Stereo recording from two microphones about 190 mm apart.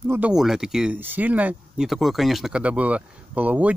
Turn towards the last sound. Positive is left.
turn(degrees=-10)  # may be behind; listen again after turning